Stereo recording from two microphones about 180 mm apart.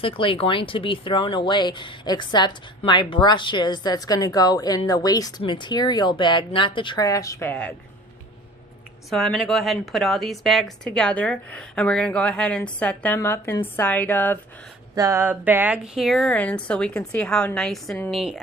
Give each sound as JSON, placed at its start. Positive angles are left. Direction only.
{"t": 0.0, "sound": "speech", "side_deg": 30}
{"t": 9.0, "sound": "a woman's voice", "side_deg": 0}
{"t": 14.9, "sound": "a woman's voice", "side_deg": -15}